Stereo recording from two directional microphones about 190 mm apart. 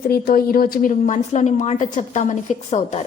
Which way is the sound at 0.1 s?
50° left (ahead or behind).